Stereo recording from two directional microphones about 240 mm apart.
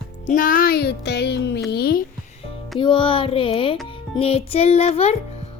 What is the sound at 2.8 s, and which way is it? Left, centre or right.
Speech, left.